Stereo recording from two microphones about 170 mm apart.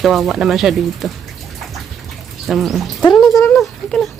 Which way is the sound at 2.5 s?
Centre (ahead or behind).